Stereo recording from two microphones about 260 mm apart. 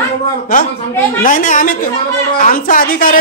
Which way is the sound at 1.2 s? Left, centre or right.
Left.